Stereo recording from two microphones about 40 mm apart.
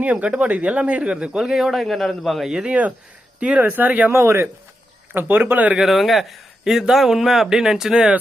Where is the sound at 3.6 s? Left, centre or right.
Right.